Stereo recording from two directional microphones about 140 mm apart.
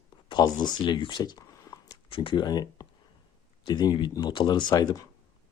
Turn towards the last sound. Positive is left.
turn(degrees=30)  # may be behind; listen again after turning